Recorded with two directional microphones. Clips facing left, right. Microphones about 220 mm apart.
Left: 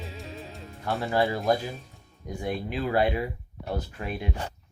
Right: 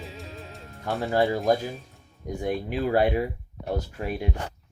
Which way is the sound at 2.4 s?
45° right (ahead or behind).